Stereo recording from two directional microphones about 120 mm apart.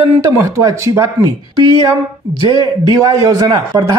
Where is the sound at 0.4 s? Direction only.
25° right (ahead or behind).